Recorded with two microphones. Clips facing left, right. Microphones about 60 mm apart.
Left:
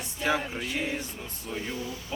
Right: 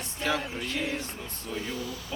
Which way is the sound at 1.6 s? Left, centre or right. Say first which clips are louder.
Even; left.